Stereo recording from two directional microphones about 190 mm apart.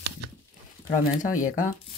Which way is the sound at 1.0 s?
45° left (ahead or behind).